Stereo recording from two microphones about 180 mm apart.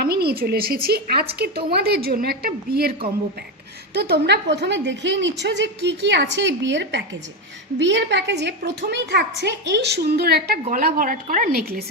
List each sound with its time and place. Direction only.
0.0 s a woman's voice: 60° right (ahead or behind)
3.9 s a woman's voice: 65° right (ahead or behind)